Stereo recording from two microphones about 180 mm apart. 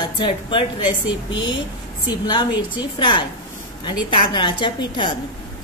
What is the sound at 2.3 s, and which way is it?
A woman's voice, 25° left (ahead or behind).